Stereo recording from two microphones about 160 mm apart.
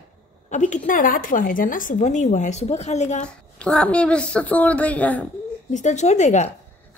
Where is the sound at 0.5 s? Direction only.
50° left (ahead or behind).